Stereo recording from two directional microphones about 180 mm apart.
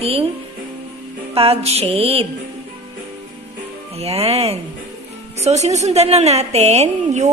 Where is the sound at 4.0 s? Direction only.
35° right (ahead or behind).